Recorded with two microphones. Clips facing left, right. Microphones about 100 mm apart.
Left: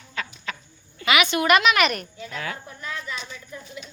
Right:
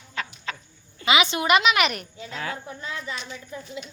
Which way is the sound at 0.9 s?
25° right (ahead or behind).